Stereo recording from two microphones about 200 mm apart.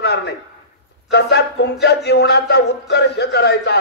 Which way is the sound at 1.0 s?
55° left (ahead or behind).